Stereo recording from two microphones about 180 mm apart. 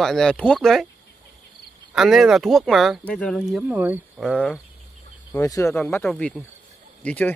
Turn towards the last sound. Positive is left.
turn(degrees=10)  # may be behind; listen again after turning